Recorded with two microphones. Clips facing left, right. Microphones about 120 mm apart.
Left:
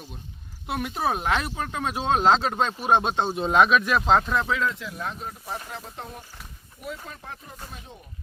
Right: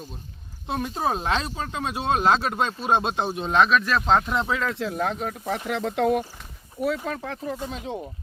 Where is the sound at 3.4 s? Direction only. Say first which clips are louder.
Left 1 dB; 5° left (ahead or behind).